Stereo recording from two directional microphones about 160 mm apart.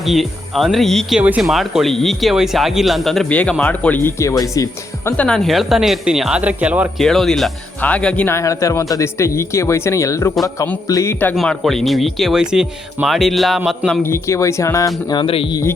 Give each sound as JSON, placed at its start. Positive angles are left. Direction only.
{"t": 0.0, "sound": "speech", "side_deg": 0}
{"t": 5.1, "sound": "speech", "side_deg": 5}
{"t": 11.3, "sound": "speech", "side_deg": 0}
{"t": 14.0, "sound": "speech", "side_deg": 20}